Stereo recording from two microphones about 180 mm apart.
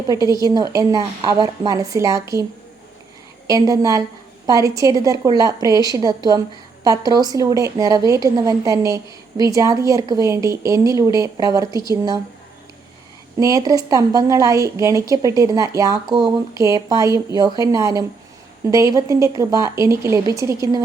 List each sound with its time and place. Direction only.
0.1 s a woman's voice: 20° right (ahead or behind)
13.4 s a woman's voice: 20° right (ahead or behind)